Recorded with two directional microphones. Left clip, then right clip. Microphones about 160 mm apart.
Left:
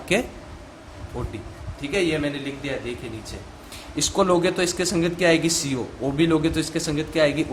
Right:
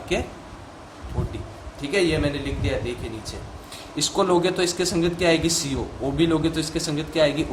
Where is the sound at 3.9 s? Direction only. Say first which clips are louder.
Left 1 dB; 40° left (ahead or behind).